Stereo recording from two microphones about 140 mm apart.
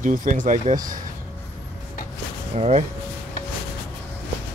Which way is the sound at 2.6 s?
50° right (ahead or behind).